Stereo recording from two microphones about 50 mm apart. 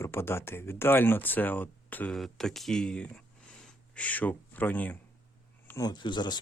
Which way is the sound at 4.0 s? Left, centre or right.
Left.